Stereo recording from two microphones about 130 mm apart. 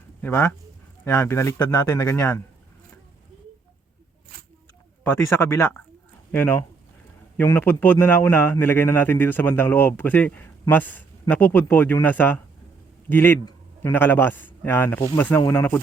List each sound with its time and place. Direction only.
0.2 s a man's voice: 15° left (ahead or behind)
5.0 s a man's voice: 15° left (ahead or behind)